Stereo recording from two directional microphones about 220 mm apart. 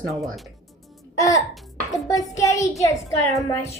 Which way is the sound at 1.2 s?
15° left (ahead or behind).